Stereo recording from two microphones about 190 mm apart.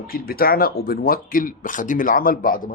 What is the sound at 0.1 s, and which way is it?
Speech, 50° left (ahead or behind).